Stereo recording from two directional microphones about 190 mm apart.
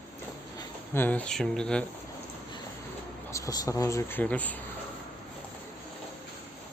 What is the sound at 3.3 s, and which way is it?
Speech, 15° left (ahead or behind).